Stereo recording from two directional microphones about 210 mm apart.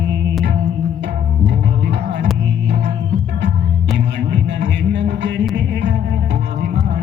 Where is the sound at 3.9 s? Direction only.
55° right (ahead or behind).